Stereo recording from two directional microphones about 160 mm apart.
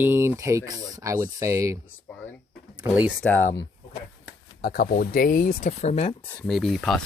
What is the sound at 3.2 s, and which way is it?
Speech, 10° left (ahead or behind).